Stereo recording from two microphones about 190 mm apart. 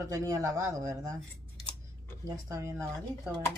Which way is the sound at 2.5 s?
15° right (ahead or behind).